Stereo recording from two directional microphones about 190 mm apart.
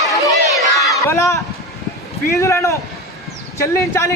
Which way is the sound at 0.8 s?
15° left (ahead or behind).